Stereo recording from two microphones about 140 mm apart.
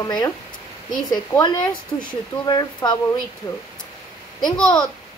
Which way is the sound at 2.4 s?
30° left (ahead or behind).